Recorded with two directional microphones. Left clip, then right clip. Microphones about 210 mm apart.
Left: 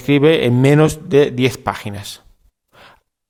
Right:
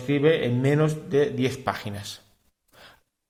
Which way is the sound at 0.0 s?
45° left (ahead or behind).